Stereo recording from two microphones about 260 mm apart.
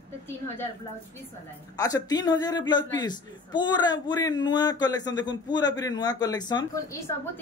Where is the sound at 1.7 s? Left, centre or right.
Centre.